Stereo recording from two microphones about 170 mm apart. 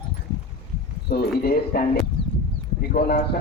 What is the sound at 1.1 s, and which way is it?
A man's voice, 65° left (ahead or behind).